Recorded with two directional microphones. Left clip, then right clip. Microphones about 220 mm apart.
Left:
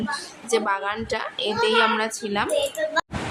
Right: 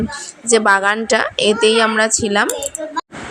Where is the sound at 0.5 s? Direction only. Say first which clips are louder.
Right 10 dB; 35° right (ahead or behind).